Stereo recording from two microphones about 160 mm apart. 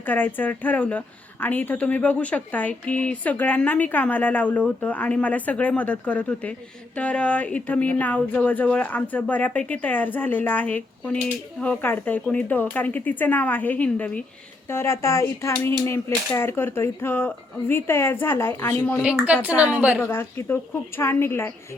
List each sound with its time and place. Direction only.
0.0 s speech: 10° left (ahead or behind)
19.1 s speech: 10° right (ahead or behind)
20.0 s speech: 15° left (ahead or behind)